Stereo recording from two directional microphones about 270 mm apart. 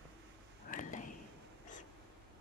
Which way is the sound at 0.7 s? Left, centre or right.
Left.